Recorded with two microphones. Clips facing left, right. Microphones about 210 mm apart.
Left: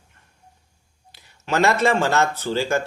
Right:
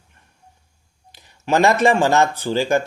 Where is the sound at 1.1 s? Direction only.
15° right (ahead or behind).